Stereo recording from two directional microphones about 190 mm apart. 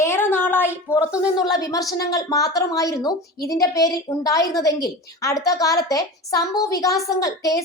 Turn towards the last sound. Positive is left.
turn(degrees=20)  # may be behind; listen again after turning